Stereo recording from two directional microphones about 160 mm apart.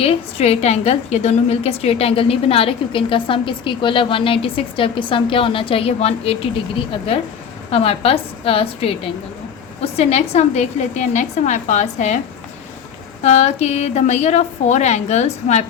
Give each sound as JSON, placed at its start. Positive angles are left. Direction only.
{"t": 0.0, "sound": "a woman's voice", "side_deg": 40}
{"t": 7.7, "sound": "a woman's voice", "side_deg": 40}
{"t": 13.2, "sound": "a woman's voice", "side_deg": 45}